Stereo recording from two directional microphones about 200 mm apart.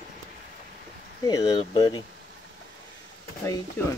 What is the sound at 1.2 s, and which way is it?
Speech, 20° left (ahead or behind).